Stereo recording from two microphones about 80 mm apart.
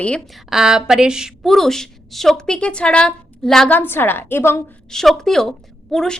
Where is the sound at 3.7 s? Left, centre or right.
Left.